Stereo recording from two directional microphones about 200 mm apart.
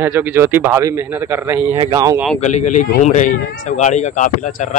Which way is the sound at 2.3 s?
35° left (ahead or behind).